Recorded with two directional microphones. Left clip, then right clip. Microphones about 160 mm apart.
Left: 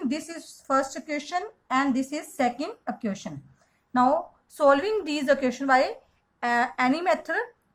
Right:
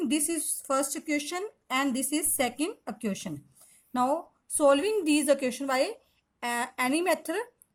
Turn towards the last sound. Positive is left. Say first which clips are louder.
# left 3 dB
turn(degrees=-45)  # may be behind; listen again after turning